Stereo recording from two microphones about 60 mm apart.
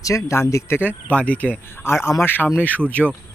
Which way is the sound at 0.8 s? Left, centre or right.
Left.